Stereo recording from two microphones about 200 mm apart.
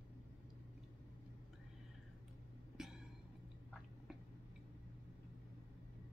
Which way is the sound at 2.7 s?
5° right (ahead or behind).